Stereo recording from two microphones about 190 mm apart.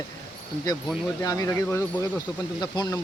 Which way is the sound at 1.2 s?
15° left (ahead or behind).